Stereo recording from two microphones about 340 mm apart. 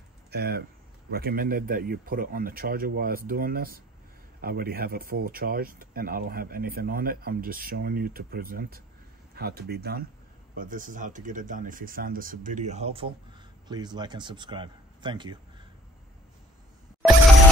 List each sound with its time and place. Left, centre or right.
0.3 s speech: right